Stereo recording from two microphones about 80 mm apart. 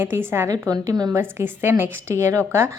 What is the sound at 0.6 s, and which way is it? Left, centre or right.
Speech, right.